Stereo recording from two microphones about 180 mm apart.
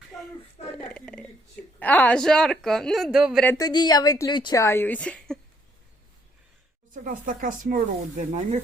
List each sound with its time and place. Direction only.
0.9 s a sound: 5° left (ahead or behind)
1.8 s a woman's voice: 10° left (ahead or behind)
3.6 s a woman's voice: 25° left (ahead or behind); by 5.4 s 5° left (ahead or behind)
6.9 s speech: 50° right (ahead or behind)